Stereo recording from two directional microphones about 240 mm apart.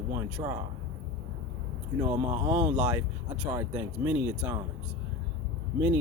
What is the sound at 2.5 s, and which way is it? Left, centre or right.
Speech, centre.